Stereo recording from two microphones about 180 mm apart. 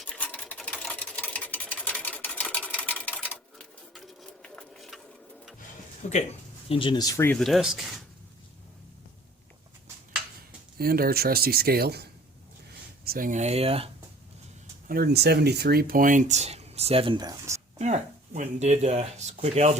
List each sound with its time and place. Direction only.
0.1 s sewing machine: 5° left (ahead or behind)
6.0 s speech: 40° left (ahead or behind)
6.7 s speech: 30° left (ahead or behind)
7.3 s speech: centre (ahead or behind)
10.8 s speech: 55° right (ahead or behind)
13.1 s speech: 50° right (ahead or behind); by 13.9 s 30° right (ahead or behind)
14.8 s speech: 55° right (ahead or behind); by 17.6 s 20° right (ahead or behind)
17.7 s speech: 40° right (ahead or behind)